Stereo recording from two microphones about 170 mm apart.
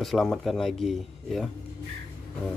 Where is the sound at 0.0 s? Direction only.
Centre (ahead or behind).